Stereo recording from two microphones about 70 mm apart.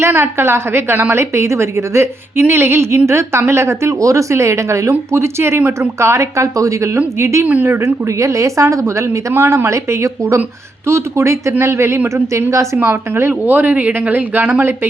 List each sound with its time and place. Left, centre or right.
0.0 s a woman's voice: right
12.8 s speech: right